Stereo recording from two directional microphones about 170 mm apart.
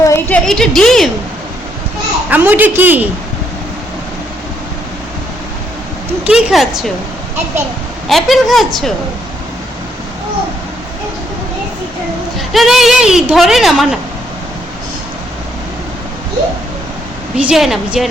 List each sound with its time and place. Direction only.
0.0 s a sound: 15° left (ahead or behind)
0.4 s a woman's voice: centre (ahead or behind)
2.3 s a woman's voice: 10° right (ahead or behind)
6.2 s a woman's voice: centre (ahead or behind)
8.0 s a woman's voice: centre (ahead or behind)
12.5 s a woman's voice: centre (ahead or behind)
17.3 s a woman's voice: centre (ahead or behind)